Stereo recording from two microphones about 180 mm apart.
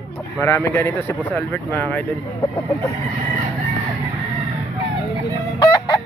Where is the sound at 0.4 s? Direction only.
10° left (ahead or behind).